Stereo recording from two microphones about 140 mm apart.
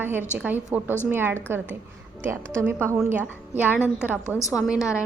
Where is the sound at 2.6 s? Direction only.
15° right (ahead or behind).